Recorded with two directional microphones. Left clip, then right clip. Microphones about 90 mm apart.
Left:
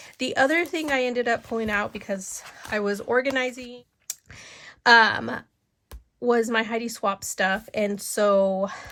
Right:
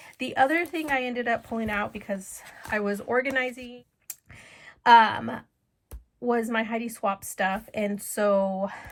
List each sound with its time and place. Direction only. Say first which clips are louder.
0.2 s speech: left 2 dB; 50° left (ahead or behind); by 8.9 s 35° left (ahead or behind)